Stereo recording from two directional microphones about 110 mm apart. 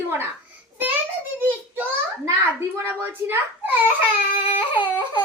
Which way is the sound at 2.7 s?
20° right (ahead or behind).